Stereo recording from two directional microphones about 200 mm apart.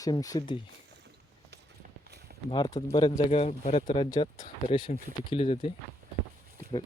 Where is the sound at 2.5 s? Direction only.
20° left (ahead or behind).